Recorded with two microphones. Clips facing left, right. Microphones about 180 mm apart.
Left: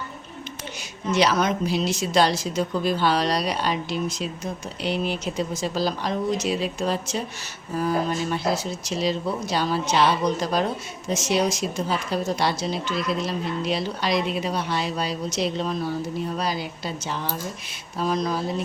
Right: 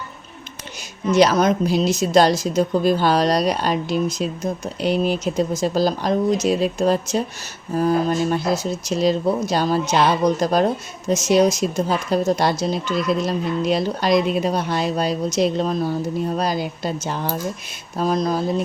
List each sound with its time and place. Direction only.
1.1 s a woman's voice: 40° right (ahead or behind)